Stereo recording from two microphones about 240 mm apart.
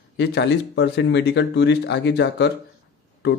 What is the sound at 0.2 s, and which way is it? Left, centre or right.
Speech, left.